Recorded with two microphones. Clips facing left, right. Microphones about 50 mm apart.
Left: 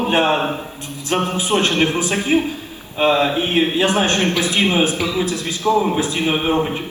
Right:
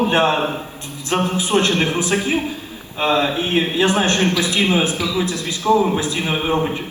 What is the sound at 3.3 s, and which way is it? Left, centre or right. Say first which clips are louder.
A man's voice: left 1 dB; left.